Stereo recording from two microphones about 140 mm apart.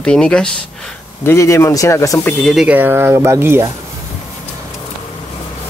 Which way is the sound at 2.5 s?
10° right (ahead or behind).